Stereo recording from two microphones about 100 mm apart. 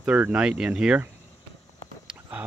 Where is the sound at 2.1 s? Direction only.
15° right (ahead or behind).